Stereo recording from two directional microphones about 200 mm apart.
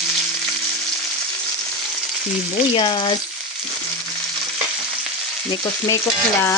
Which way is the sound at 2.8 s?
20° left (ahead or behind).